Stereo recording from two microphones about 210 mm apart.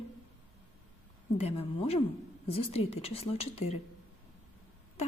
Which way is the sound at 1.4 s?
30° left (ahead or behind).